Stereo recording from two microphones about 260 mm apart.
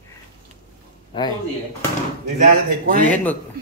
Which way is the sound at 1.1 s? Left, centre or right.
Centre.